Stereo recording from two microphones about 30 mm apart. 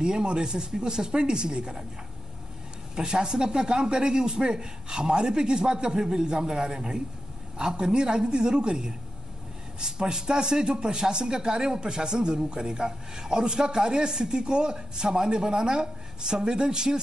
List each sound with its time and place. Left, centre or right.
0.0 s speech: right
3.0 s speech: right